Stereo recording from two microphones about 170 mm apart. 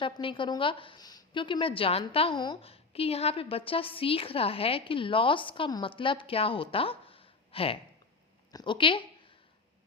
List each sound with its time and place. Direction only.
0.0 s a woman's voice: 30° left (ahead or behind)